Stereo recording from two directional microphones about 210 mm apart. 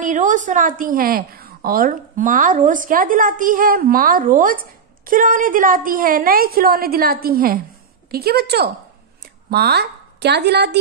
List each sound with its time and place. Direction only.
0.0 s a woman's voice: 35° right (ahead or behind); by 10.8 s 50° right (ahead or behind)